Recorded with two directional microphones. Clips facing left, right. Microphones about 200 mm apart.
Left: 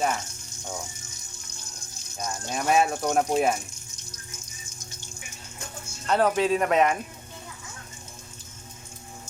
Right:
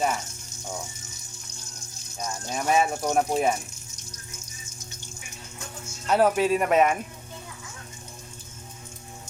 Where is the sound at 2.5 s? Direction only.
Centre (ahead or behind).